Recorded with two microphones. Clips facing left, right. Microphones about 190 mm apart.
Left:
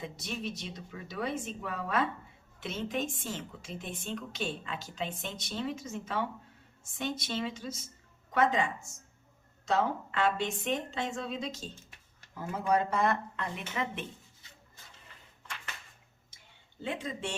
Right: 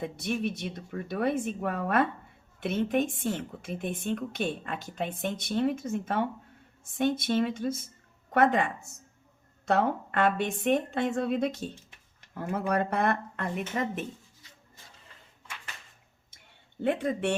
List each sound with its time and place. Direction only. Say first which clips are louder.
0.0 s a woman's voice: right 7 dB; 55° right (ahead or behind)
16.8 s a woman's voice: right 9 dB; 60° right (ahead or behind)